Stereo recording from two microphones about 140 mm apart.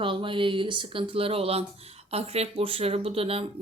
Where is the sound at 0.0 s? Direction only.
35° right (ahead or behind).